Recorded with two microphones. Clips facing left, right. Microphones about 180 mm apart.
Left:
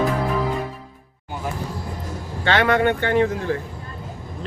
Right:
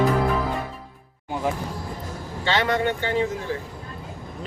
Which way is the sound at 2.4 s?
60° left (ahead or behind).